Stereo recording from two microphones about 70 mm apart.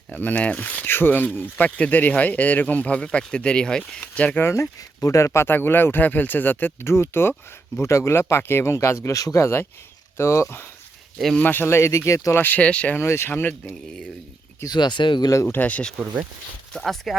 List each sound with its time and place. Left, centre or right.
0.1 s speech: left
4.4 s speech: left
4.8 s speech: left
11.3 s speech: left
11.9 s speech: left
12.3 s speech: left
13.0 s speech: left
14.7 s speech: left
15.4 s speech: left
16.7 s speech: centre